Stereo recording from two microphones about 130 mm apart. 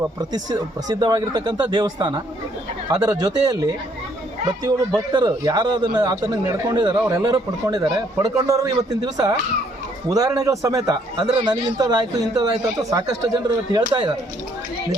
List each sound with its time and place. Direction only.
0.2 s a man's voice: 30° right (ahead or behind)